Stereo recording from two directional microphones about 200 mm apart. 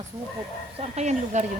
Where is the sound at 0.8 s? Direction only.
35° right (ahead or behind).